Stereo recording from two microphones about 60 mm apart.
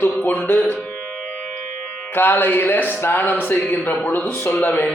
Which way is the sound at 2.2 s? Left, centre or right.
Left.